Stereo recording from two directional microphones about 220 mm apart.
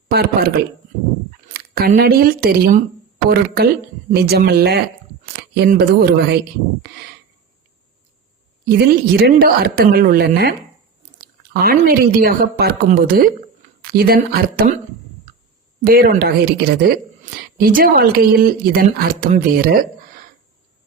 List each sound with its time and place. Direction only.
0.1 s a woman's voice: 45° right (ahead or behind)
8.9 s a woman's voice: 45° right (ahead or behind)
11.5 s a woman's voice: 40° right (ahead or behind)
15.8 s a woman's voice: 40° right (ahead or behind)